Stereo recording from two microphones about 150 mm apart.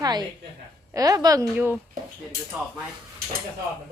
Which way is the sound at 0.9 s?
25° right (ahead or behind).